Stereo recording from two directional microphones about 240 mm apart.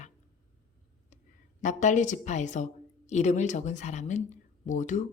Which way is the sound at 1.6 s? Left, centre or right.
Left.